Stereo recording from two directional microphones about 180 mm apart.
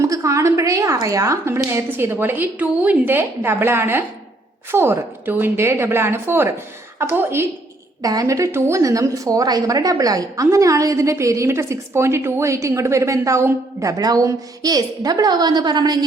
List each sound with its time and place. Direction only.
0.0 s a woman's voice: 15° right (ahead or behind)